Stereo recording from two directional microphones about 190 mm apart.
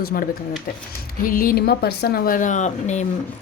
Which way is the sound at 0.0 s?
50° left (ahead or behind).